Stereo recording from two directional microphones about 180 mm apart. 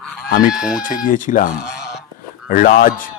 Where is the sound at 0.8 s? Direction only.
50° left (ahead or behind).